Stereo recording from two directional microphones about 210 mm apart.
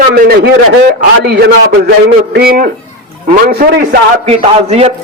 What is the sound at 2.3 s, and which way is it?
A man's voice, 45° right (ahead or behind).